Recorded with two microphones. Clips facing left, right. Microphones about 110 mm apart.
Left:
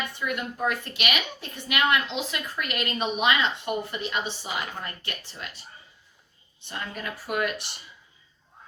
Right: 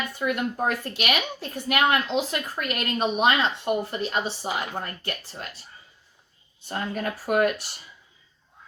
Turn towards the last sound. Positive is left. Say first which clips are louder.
# right 6 dB
turn(degrees=-45)  # may be behind; listen again after turning